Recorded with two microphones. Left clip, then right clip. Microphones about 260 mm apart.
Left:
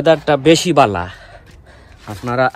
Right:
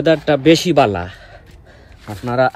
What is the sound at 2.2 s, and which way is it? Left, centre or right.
Speech, centre.